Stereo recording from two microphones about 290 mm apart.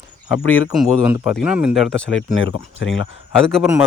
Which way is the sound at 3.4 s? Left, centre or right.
Centre.